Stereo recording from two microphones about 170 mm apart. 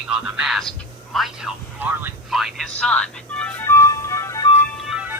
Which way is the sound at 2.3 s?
Centre (ahead or behind).